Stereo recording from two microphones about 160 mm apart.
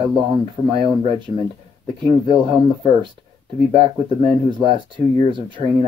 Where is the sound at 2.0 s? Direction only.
30° right (ahead or behind).